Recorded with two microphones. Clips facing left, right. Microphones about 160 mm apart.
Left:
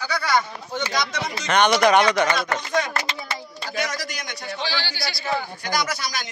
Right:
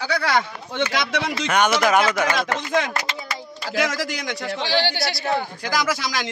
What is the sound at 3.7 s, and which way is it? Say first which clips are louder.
Speech: right 5 dB; 90° right.